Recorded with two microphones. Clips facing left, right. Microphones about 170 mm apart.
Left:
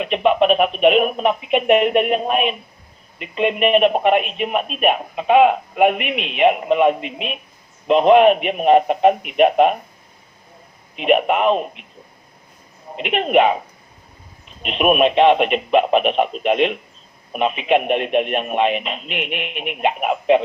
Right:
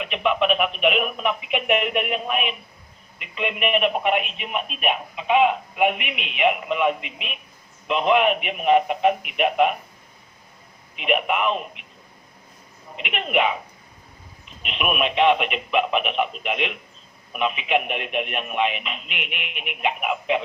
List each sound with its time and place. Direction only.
0.0 s speech: 40° left (ahead or behind)
10.9 s speech: 40° left (ahead or behind)
13.0 s speech: 40° left (ahead or behind)
14.6 s speech: 40° left (ahead or behind)